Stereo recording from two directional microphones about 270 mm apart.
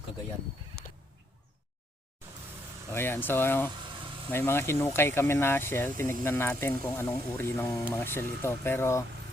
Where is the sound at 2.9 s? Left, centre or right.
Centre.